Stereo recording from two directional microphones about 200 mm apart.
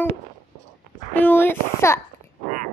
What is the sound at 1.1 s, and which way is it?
Speech, 10° left (ahead or behind).